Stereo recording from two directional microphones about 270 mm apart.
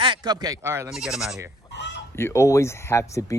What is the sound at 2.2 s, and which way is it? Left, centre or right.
Speech, centre.